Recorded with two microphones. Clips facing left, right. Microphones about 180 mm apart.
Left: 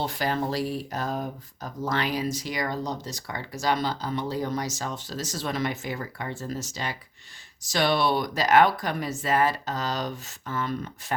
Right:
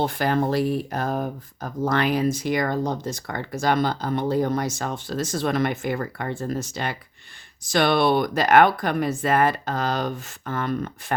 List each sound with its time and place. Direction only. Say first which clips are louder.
0.0 s speech: right 5 dB; 55° right (ahead or behind)